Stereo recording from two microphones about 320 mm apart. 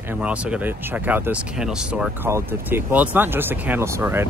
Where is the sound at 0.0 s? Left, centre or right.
Centre.